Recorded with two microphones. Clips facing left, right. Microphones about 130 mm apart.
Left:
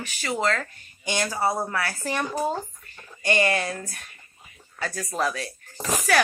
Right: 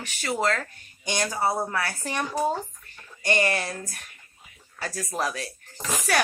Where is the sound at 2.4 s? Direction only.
Centre (ahead or behind).